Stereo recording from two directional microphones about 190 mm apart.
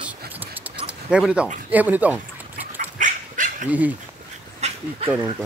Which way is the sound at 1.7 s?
10° right (ahead or behind).